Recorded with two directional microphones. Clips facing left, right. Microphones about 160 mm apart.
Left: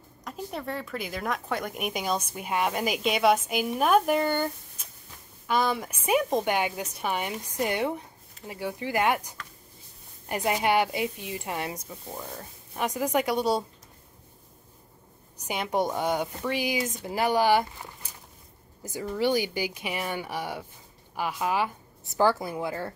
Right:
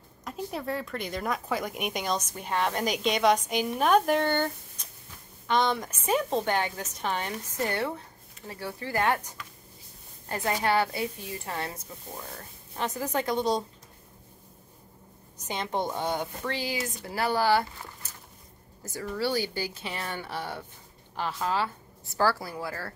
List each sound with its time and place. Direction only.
0.2 s a woman's voice: centre (ahead or behind)
15.3 s a woman's voice: 10° left (ahead or behind)